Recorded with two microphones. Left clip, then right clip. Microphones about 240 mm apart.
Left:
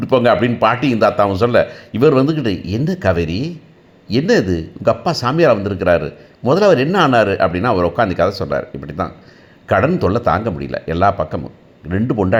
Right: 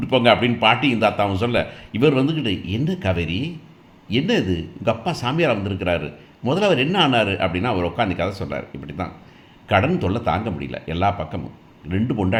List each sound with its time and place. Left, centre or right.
0.0 s speech: left